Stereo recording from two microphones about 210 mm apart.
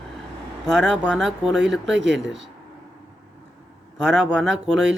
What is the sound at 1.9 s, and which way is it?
Speech, 55° right (ahead or behind).